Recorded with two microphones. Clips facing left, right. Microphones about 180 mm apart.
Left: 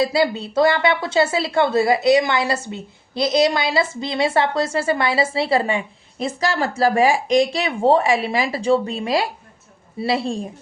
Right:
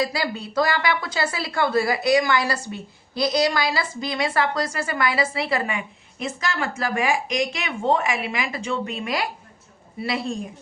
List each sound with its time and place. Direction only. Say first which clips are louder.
0.0 s a woman's voice: left 6 dB; 25° left (ahead or behind)